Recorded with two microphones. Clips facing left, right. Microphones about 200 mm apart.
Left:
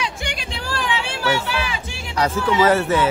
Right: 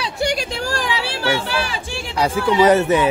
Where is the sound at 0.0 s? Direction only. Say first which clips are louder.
Right 6 dB; 40° right (ahead or behind).